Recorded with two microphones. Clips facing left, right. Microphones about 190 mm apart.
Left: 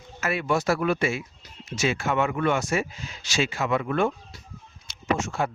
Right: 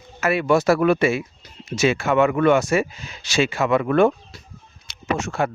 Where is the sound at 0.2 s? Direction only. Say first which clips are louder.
Right 7 dB; 70° right (ahead or behind).